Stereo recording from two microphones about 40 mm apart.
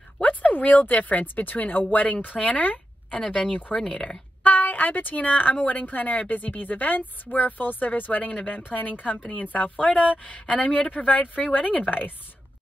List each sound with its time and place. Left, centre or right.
0.2 s speech: left
2.3 s a woman's voice: left
2.6 s a sound: left
3.7 s speech: centre
4.4 s a woman's voice: left